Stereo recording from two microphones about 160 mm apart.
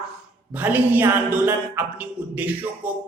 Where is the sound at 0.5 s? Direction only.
10° right (ahead or behind).